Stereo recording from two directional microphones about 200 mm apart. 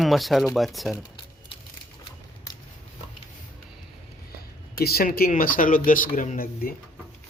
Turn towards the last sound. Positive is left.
turn(degrees=45)  # may be behind; listen again after turning